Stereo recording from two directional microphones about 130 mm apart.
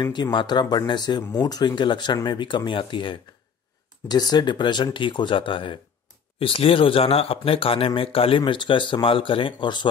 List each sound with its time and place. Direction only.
0.0 s speech: 35° left (ahead or behind)